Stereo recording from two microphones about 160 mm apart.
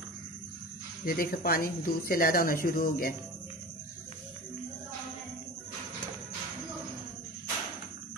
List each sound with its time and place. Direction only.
1.0 s speech: 65° left (ahead or behind)